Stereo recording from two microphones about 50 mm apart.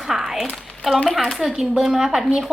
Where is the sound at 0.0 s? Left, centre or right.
Centre.